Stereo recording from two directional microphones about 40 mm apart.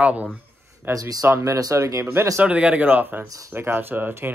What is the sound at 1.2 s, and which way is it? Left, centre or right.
Speech, right.